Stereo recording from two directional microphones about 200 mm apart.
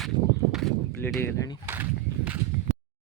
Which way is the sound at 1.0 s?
10° left (ahead or behind).